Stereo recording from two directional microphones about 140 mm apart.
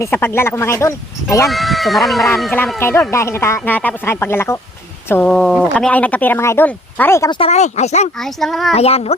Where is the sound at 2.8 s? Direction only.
20° left (ahead or behind).